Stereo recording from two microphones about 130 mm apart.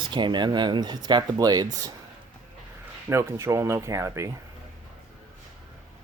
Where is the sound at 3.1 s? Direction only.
20° right (ahead or behind).